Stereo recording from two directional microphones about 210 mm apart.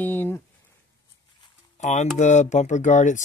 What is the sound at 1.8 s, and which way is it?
Speech, 35° left (ahead or behind).